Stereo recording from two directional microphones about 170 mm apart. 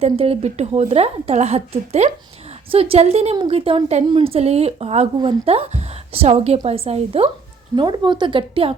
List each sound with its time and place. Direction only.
0.0 s a woman's voice: 35° right (ahead or behind)